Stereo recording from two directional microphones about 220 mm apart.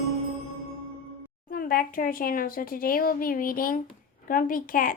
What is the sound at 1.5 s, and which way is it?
Speech, 40° left (ahead or behind).